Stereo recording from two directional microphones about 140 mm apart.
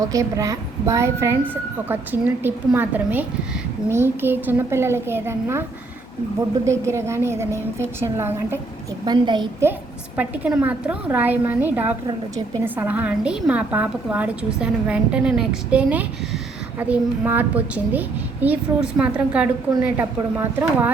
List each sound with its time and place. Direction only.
0.1 s a woman's voice: 25° right (ahead or behind)
6.7 s a woman's voice: 20° right (ahead or behind)
9.0 s a woman's voice: 35° right (ahead or behind)
10.2 s a woman's voice: 10° right (ahead or behind)